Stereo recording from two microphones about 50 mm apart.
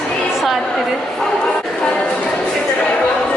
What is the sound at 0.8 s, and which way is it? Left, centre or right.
Speech, centre.